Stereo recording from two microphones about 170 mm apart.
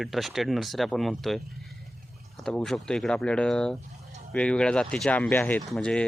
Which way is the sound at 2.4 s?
5° left (ahead or behind).